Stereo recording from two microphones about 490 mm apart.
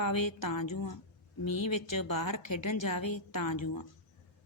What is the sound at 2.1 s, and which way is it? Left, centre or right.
Speech, left.